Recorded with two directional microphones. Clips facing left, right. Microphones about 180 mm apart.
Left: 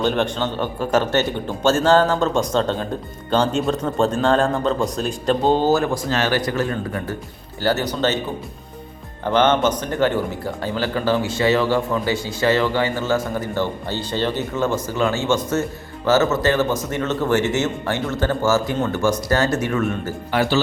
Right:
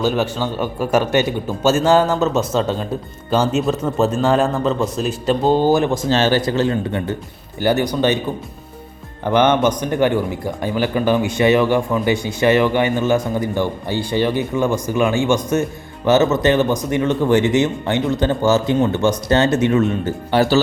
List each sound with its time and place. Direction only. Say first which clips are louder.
0.0 s a man's voice: right 1 dB; 5° right (ahead or behind)
9.2 s a man's voice: right 2 dB; 15° right (ahead or behind)